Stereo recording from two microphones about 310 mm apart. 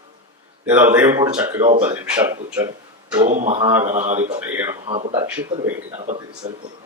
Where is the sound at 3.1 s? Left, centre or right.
Centre.